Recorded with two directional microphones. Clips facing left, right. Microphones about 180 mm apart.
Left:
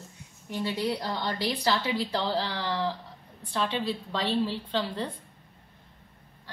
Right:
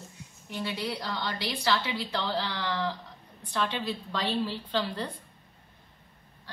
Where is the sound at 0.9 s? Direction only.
40° left (ahead or behind); by 5.1 s 25° left (ahead or behind).